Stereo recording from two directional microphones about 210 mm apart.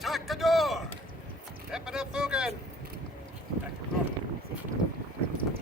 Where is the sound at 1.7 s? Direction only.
5° right (ahead or behind).